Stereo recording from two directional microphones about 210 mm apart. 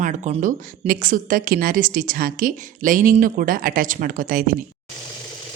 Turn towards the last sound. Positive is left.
turn(degrees=-40)  # may be behind; listen again after turning